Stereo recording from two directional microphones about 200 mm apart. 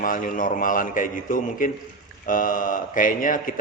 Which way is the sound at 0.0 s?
45° left (ahead or behind).